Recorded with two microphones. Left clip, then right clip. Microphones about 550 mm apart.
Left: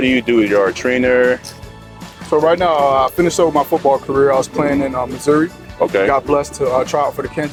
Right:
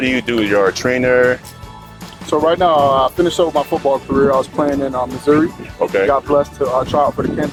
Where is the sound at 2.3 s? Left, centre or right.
Left.